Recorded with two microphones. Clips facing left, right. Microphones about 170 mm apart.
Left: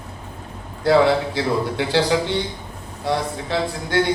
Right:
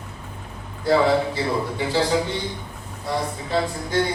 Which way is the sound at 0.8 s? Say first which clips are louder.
Left 2 dB; 80° left.